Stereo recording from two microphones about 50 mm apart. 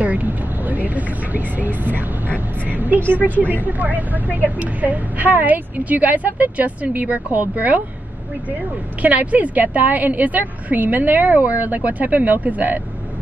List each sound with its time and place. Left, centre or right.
0.0 s vehicle: right
2.0 s a woman's voice: right
9.0 s a woman's voice: right